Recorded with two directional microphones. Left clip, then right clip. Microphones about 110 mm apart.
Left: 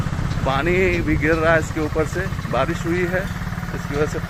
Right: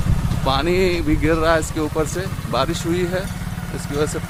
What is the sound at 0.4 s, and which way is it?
Speech, 30° right (ahead or behind).